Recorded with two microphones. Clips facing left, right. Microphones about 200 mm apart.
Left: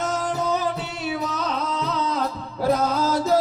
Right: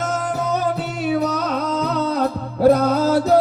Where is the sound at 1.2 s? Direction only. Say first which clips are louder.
Right 5 dB; 40° right (ahead or behind).